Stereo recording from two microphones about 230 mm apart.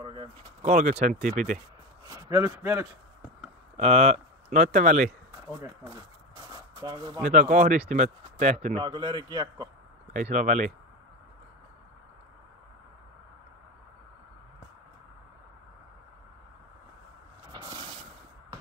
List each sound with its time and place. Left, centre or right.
0.0 s speech: right
2.0 s a man's voice: centre
3.7 s speech: right
5.6 s speech: centre
6.5 s a sound: centre
7.2 s speech: right; by 9.7 s centre
10.1 s speech: right
17.5 s a sound: centre